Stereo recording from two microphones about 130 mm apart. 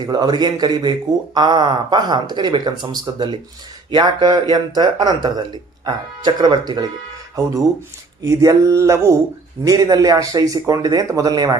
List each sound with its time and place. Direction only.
0.0 s a man's voice: 35° right (ahead or behind)
8.2 s speech: 25° right (ahead or behind)